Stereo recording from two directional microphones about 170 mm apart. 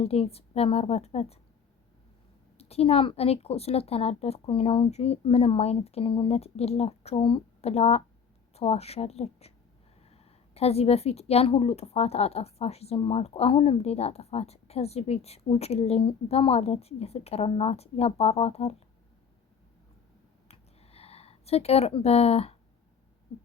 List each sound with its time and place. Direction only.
0.0 s a woman's voice: 35° left (ahead or behind)
2.6 s a woman's voice: 35° left (ahead or behind)
20.5 s a sound: 35° left (ahead or behind)